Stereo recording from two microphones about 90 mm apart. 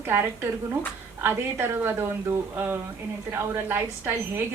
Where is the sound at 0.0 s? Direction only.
25° right (ahead or behind).